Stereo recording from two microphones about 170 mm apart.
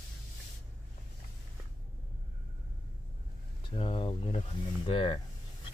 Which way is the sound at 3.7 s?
30° left (ahead or behind).